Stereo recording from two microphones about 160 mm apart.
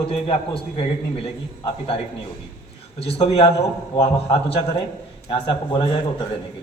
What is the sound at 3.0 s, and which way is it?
A man's voice, 35° left (ahead or behind).